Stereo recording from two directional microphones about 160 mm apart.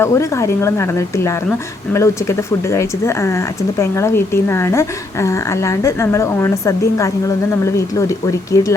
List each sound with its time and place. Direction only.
0.0 s a woman's voice: 20° left (ahead or behind)